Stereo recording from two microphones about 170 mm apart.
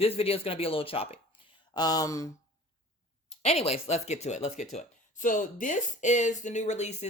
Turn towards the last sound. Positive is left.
turn(degrees=45)  # may be behind; listen again after turning